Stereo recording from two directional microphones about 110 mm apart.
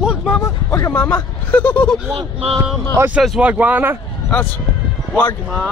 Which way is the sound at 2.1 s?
60° right (ahead or behind).